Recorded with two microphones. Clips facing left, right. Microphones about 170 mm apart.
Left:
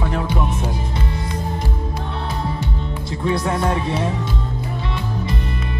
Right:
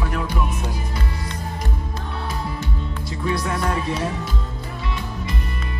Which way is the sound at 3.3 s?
25° left (ahead or behind).